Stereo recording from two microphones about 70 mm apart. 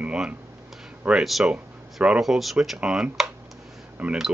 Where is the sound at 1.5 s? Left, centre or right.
Centre.